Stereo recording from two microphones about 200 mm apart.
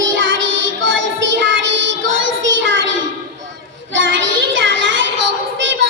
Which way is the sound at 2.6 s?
70° right (ahead or behind).